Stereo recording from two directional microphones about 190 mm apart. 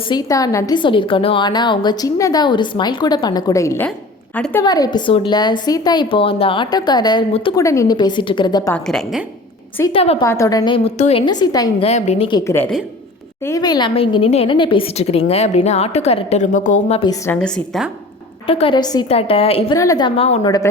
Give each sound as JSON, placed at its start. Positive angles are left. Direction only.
{"t": 0.1, "sound": "a woman's voice", "side_deg": 20}
{"t": 4.6, "sound": "a woman's voice", "side_deg": 20}
{"t": 8.7, "sound": "a woman's voice", "side_deg": 0}
{"t": 9.9, "sound": "a woman's voice", "side_deg": 30}
{"t": 10.2, "sound": "a woman's voice", "side_deg": 15}
{"t": 11.3, "sound": "a woman's voice", "side_deg": 20}
{"t": 11.8, "sound": "a woman's voice", "side_deg": 35}
{"t": 12.5, "sound": "a woman's voice", "side_deg": 10}
{"t": 17.0, "sound": "a woman's voice", "side_deg": 20}
{"t": 18.4, "sound": "a woman's voice", "side_deg": 30}
{"t": 20.4, "sound": "a woman's voice", "side_deg": 20}